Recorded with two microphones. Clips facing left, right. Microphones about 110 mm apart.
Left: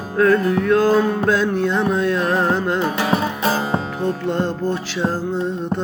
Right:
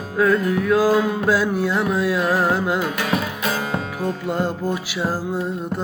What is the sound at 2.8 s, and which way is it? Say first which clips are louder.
Music: left 3 dB; 30° left (ahead or behind).